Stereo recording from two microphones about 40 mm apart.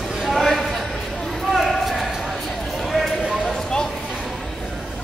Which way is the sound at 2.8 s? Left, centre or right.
Centre.